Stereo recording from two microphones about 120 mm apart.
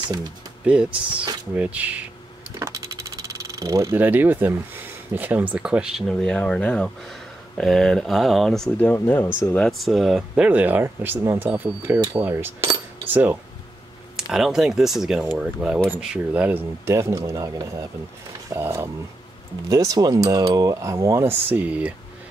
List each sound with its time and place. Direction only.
0.7 s speech: 10° right (ahead or behind)
3.5 s speech: 25° right (ahead or behind); by 9.0 s 10° left (ahead or behind)
9.2 s speech: 25° left (ahead or behind)
9.6 s speech: centre (ahead or behind); by 13.4 s 15° right (ahead or behind)
14.1 s speech: 5° right (ahead or behind)